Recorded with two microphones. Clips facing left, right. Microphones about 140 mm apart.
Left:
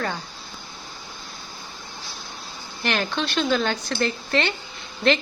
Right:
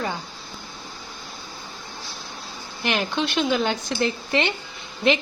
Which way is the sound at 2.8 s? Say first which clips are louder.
Right 1 dB; 15° right (ahead or behind).